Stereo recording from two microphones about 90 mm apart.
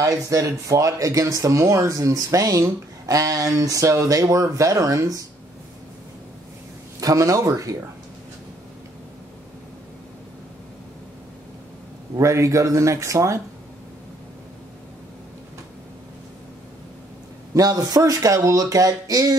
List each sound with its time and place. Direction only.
0.0 s speech: 35° right (ahead or behind)
7.0 s speech: 40° right (ahead or behind)
12.2 s speech: 35° right (ahead or behind)
17.6 s speech: 40° right (ahead or behind)